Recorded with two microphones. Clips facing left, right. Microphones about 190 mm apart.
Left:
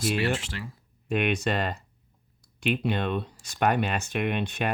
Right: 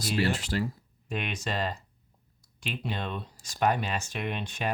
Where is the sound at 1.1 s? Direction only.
60° left (ahead or behind).